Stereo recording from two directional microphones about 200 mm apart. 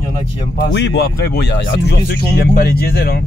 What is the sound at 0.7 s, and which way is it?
Speech, 60° left (ahead or behind).